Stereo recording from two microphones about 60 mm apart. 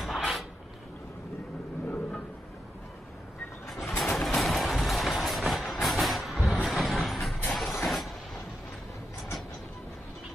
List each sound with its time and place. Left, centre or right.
0.0 s a sound: centre
3.6 s bird: centre
4.0 s vehicle: centre